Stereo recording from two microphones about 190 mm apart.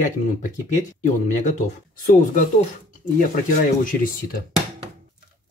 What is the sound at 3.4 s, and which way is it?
Speech, 45° left (ahead or behind).